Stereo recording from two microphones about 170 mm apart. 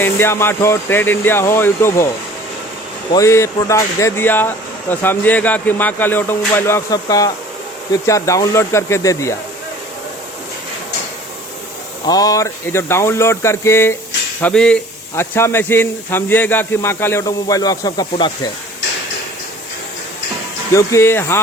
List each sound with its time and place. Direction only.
0.0 s speech: 15° left (ahead or behind)
3.1 s speech: 20° left (ahead or behind)
12.0 s speech: 20° left (ahead or behind)
20.7 s speech: 15° left (ahead or behind)